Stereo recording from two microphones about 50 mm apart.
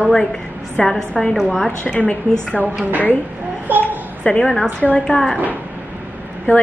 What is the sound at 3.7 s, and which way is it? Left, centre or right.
Speech, right.